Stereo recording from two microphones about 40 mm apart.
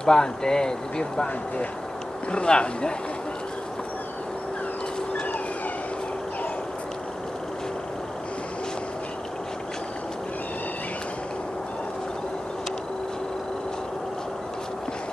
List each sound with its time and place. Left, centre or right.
0.0 s speech: centre
2.3 s speech: left